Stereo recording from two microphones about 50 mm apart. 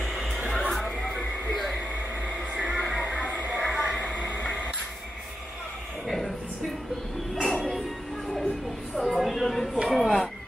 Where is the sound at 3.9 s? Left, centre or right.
Left.